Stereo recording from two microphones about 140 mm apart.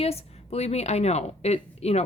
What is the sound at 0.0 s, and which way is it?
A woman's voice, 45° left (ahead or behind).